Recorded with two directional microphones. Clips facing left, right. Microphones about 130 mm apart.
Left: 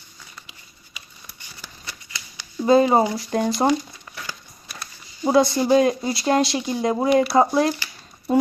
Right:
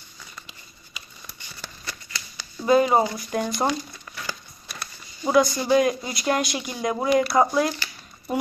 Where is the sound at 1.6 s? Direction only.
15° left (ahead or behind).